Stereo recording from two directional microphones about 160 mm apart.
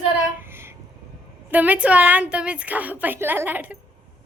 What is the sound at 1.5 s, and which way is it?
A woman's voice, 10° right (ahead or behind).